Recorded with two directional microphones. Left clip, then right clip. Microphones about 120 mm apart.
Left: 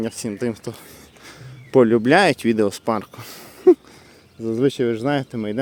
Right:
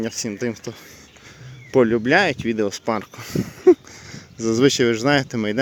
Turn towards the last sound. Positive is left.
turn(degrees=-10)  # may be behind; listen again after turning